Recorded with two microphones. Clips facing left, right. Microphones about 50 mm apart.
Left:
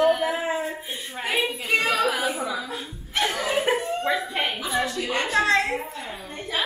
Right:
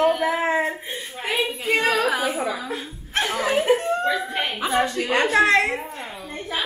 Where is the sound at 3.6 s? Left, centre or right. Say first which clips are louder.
Right 4 dB; centre.